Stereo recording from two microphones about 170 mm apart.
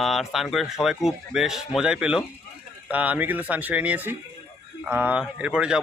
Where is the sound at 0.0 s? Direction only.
Centre (ahead or behind).